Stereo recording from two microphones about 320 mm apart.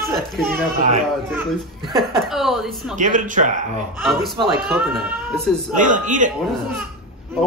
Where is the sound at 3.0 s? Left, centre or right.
Right.